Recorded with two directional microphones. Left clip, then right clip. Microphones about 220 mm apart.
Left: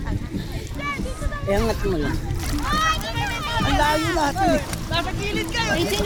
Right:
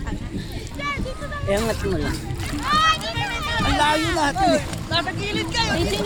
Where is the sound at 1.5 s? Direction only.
5° left (ahead or behind).